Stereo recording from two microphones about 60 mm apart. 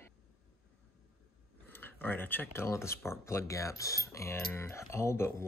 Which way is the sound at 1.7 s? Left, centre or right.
Left.